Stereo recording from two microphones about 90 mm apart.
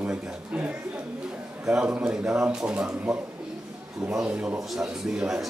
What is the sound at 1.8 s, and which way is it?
A man's voice, 15° right (ahead or behind).